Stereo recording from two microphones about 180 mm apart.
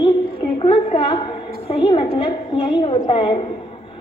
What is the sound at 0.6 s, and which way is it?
A woman's voice, 30° left (ahead or behind).